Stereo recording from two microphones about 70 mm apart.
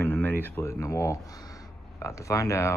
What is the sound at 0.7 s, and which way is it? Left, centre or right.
Speech, left.